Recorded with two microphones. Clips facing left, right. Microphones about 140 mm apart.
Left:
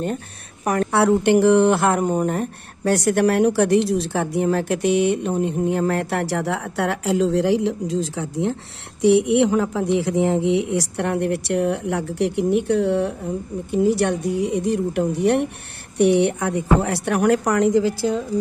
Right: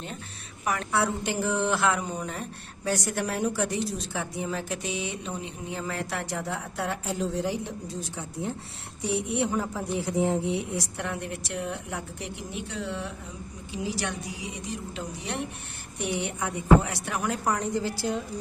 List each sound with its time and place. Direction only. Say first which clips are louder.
0.9 s speech: left 13 dB; 70° left (ahead or behind); by 17.8 s 90° left